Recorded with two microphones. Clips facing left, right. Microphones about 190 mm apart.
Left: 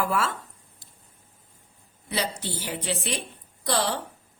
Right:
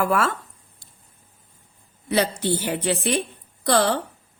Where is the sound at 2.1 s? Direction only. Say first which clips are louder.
Right 9 dB; 55° right (ahead or behind).